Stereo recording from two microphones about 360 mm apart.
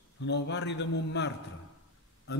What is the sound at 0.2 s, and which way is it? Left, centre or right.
A man's voice, left.